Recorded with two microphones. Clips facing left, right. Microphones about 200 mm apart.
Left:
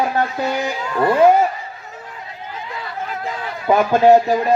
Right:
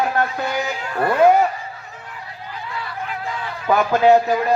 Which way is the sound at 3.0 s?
40° left (ahead or behind).